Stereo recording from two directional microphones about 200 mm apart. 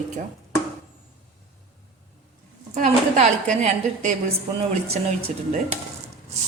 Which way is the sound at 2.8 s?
40° right (ahead or behind).